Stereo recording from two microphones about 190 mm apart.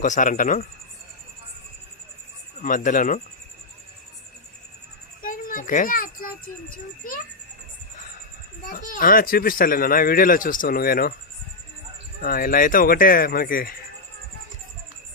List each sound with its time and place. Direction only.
0.0 s speech: 40° left (ahead or behind)
2.6 s speech: 40° left (ahead or behind)
5.2 s a sound: 45° left (ahead or behind)
8.6 s speech: 45° left (ahead or behind)
12.2 s speech: 50° left (ahead or behind)